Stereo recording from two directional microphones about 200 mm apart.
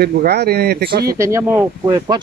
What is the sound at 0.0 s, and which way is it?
Speech, 55° right (ahead or behind).